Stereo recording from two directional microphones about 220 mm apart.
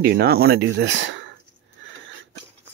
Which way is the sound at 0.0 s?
45° right (ahead or behind).